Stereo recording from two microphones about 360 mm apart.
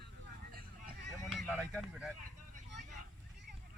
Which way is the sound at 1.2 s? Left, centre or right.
Centre.